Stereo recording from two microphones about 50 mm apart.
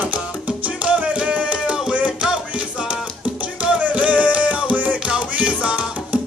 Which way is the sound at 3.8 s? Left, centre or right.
Right.